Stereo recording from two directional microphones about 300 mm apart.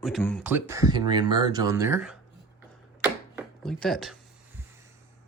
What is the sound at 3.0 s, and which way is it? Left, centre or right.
Chopping, centre.